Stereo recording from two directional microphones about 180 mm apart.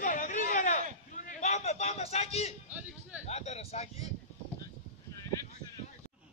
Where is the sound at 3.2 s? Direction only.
35° left (ahead or behind).